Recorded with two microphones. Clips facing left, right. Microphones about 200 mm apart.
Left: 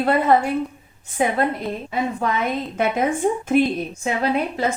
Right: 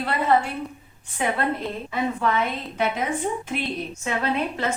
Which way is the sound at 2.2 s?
40° left (ahead or behind).